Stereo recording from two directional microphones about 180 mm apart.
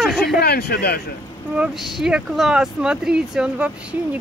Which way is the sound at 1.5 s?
5° right (ahead or behind).